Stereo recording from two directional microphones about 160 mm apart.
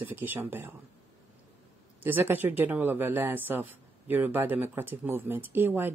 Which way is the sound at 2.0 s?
10° right (ahead or behind).